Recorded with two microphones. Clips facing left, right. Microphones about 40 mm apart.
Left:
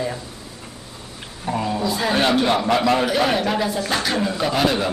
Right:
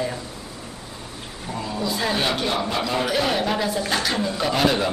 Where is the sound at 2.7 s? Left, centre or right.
Left.